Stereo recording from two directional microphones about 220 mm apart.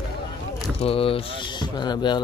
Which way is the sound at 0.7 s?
25° left (ahead or behind).